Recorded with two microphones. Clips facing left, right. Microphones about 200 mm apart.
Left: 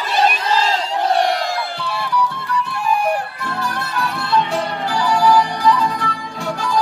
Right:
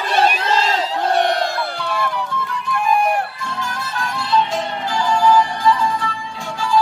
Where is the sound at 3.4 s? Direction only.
60° left (ahead or behind).